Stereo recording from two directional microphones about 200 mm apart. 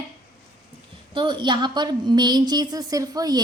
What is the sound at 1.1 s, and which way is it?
A woman's voice, 25° right (ahead or behind).